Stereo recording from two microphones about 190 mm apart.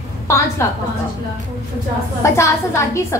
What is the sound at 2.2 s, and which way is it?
Speech, 15° left (ahead or behind).